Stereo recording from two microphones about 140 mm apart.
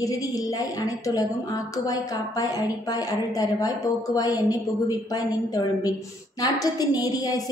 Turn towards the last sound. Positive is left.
turn(degrees=25)  # may be behind; listen again after turning